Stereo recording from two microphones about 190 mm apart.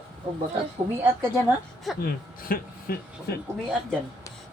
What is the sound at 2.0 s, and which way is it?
Speech, 50° left (ahead or behind).